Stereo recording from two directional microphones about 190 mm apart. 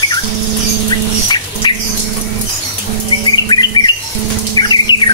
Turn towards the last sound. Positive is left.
turn(degrees=20)  # may be behind; listen again after turning